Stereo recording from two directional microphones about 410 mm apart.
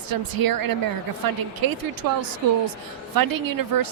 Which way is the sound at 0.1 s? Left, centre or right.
Right.